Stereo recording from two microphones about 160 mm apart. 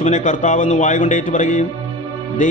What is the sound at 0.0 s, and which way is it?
A man's voice, 50° left (ahead or behind).